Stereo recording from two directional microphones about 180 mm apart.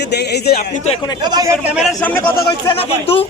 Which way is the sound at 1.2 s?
20° right (ahead or behind).